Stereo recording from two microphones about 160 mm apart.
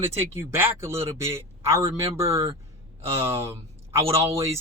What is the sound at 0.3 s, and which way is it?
A man's voice, 15° right (ahead or behind).